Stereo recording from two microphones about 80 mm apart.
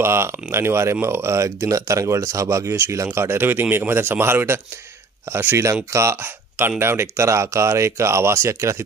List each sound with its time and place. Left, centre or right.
0.0 s speech: right
5.9 s speech: right